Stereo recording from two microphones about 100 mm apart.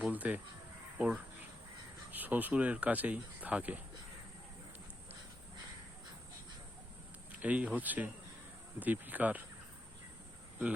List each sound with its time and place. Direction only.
0.0 s speech: 15° right (ahead or behind)
7.3 s speech: 15° right (ahead or behind)